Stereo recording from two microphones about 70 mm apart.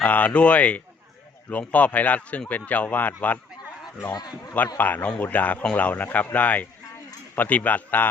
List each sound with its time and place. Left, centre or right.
0.0 s speech: centre
4.1 s a man's voice: left
4.8 s speech: left